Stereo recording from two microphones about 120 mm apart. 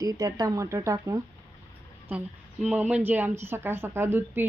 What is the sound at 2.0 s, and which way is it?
A woman's voice, 10° right (ahead or behind).